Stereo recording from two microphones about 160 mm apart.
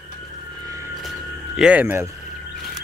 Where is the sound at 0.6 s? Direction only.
20° right (ahead or behind).